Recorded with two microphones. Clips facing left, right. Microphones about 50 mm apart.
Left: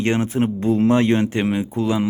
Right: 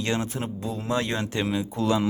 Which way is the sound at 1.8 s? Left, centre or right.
Centre.